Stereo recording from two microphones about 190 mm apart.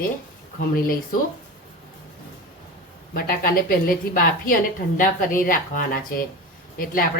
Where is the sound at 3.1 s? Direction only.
50° left (ahead or behind).